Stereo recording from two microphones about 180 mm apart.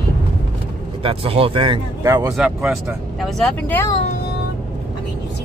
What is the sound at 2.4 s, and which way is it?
Speech, 5° right (ahead or behind).